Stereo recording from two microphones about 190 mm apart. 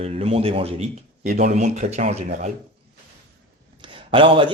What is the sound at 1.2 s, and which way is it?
Speech, 45° right (ahead or behind).